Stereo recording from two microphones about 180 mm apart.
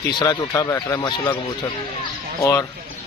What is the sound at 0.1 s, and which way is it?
Speech, 20° left (ahead or behind).